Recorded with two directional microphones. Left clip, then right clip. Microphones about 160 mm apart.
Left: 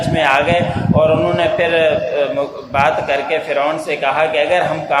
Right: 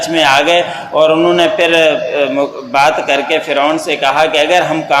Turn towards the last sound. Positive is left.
turn(degrees=-30)  # may be behind; listen again after turning